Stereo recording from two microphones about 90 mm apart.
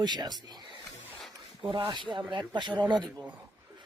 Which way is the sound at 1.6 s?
70° right (ahead or behind).